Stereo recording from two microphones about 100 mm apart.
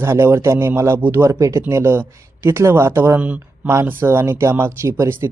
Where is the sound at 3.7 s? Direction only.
25° right (ahead or behind).